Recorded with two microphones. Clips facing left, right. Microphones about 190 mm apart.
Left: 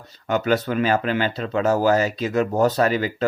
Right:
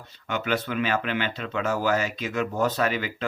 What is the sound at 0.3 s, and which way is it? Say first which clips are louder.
Speech: left 7 dB; 40° left (ahead or behind).